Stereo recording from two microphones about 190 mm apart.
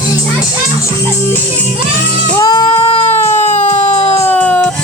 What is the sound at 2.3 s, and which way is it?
Music, 20° left (ahead or behind).